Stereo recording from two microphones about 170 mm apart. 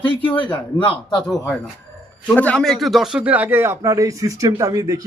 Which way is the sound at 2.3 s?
5° left (ahead or behind).